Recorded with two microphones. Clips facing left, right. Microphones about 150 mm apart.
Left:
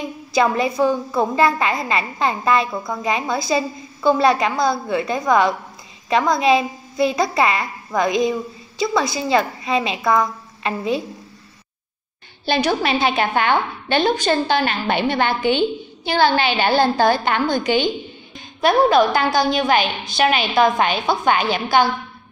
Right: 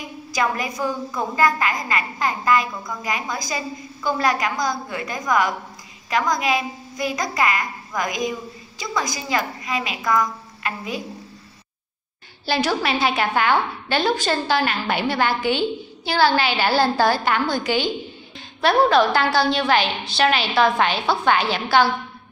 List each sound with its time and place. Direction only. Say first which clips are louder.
0.3 s a woman's voice: left 6 dB; 30° left (ahead or behind)
12.4 s a woman's voice: left 3 dB; 20° left (ahead or behind)